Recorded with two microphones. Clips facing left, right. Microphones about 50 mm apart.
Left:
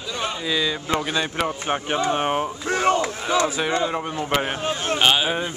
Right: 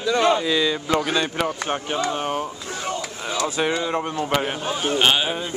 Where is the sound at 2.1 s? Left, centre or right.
Left.